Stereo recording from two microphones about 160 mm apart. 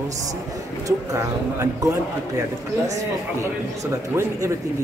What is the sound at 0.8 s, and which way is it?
Speech, 20° right (ahead or behind).